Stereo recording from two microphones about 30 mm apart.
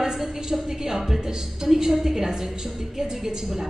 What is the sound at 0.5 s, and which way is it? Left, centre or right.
A man's voice, centre.